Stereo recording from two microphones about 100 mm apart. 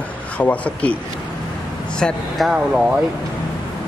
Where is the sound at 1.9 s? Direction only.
10° left (ahead or behind).